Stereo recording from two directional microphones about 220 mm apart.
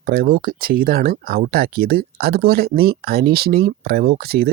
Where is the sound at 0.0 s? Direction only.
45° right (ahead or behind).